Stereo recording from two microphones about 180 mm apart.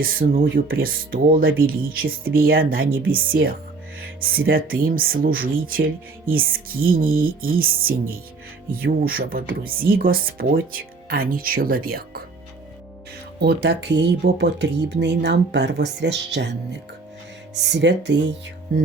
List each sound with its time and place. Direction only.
0.0 s speech: 50° right (ahead or behind)
13.4 s speech: 65° right (ahead or behind)
17.5 s speech: 70° right (ahead or behind)